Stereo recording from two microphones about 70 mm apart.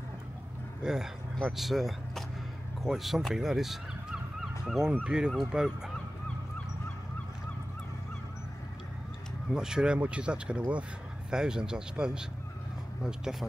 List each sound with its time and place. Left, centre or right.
1.4 s speech: centre
9.5 s speech: centre